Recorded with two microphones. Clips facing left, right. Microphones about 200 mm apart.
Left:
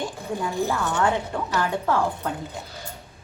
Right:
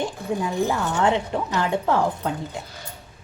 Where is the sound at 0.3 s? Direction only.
20° right (ahead or behind).